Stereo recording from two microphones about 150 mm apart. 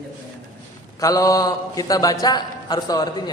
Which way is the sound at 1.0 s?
25° left (ahead or behind).